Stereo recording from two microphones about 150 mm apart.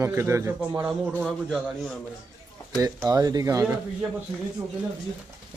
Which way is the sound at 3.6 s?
10° right (ahead or behind).